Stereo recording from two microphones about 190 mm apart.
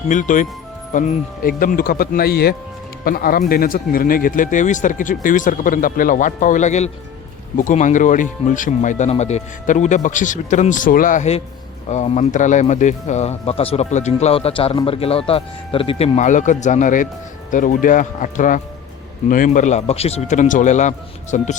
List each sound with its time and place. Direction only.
0.1 s speech: 40° left (ahead or behind)